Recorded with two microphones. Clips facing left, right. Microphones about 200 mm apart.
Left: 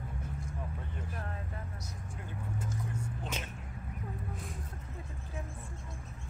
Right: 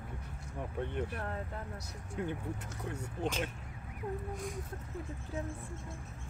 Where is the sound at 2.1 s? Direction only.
70° right (ahead or behind).